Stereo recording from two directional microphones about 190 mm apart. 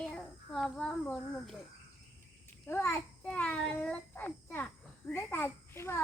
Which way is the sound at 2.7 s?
10° left (ahead or behind).